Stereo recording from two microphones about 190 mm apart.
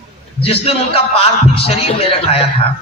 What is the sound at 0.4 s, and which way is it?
A man's voice, 30° left (ahead or behind).